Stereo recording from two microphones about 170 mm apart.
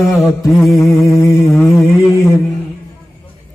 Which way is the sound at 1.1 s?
20° left (ahead or behind).